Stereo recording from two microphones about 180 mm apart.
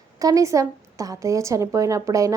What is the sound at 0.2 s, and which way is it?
A woman's voice, 20° right (ahead or behind).